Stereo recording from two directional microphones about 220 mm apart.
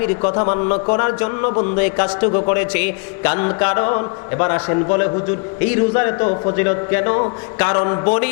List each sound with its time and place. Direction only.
0.2 s a man's voice: 25° left (ahead or behind)